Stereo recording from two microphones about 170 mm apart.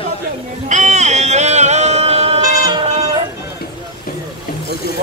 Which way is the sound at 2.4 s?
25° right (ahead or behind).